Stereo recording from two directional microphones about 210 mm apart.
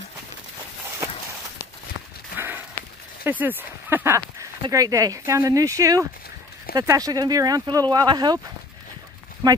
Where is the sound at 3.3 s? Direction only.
10° right (ahead or behind).